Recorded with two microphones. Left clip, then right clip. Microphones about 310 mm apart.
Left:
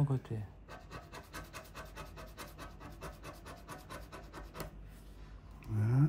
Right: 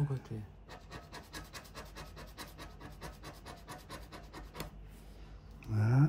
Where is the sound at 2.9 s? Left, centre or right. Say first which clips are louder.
Left 1 dB; centre.